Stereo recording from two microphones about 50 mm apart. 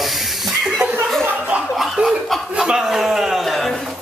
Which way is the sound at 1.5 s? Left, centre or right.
Right.